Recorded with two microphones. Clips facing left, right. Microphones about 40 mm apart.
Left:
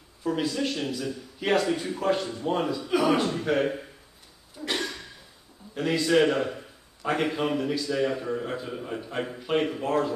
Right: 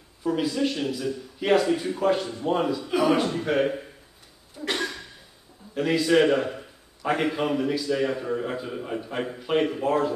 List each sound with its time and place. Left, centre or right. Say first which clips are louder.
0.2 s a man's voice: right 3 dB; centre
4.6 s a sound: right 2 dB; centre
5.8 s a man's voice: right 2 dB; centre